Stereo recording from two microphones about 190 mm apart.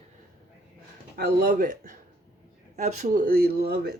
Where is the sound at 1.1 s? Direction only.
50° right (ahead or behind).